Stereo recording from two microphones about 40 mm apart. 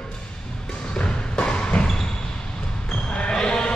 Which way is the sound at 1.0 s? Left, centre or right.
Left.